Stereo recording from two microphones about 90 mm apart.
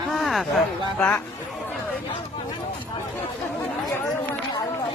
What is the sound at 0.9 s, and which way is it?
Speech, 15° left (ahead or behind).